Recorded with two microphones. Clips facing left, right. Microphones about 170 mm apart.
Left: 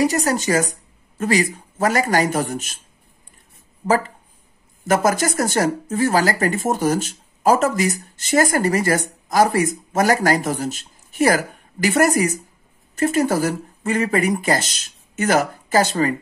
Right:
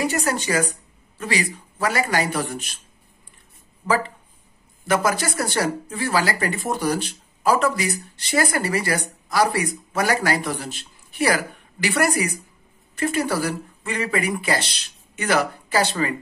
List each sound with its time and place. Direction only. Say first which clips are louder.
0.0 s speech: left 4 dB; 40° left (ahead or behind)
3.8 s speech: left 3 dB; 45° left (ahead or behind)